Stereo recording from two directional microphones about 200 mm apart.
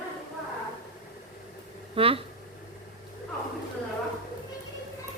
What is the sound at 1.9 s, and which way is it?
Speech, 30° right (ahead or behind).